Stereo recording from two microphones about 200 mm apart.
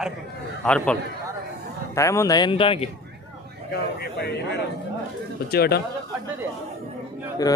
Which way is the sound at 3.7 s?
55° left (ahead or behind).